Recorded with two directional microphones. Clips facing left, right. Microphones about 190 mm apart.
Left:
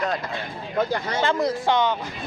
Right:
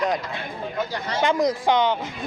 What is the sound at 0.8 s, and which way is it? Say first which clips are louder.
Speech: left 5 dB; 55° left (ahead or behind).